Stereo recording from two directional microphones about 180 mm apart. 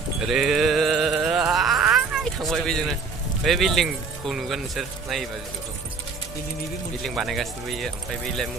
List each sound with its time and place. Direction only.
0.3 s music: centre (ahead or behind)
3.4 s speech: centre (ahead or behind)
7.0 s speech: centre (ahead or behind)